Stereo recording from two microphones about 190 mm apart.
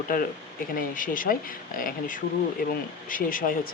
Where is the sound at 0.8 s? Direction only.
45° left (ahead or behind).